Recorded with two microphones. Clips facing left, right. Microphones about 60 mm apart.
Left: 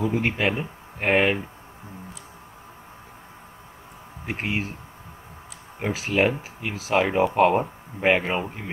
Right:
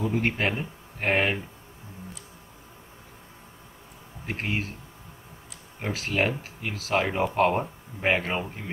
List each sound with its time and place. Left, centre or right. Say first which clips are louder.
0.0 s speech: left 3 dB; centre
4.3 s speech: left 2 dB; centre
5.8 s speech: left 4 dB; centre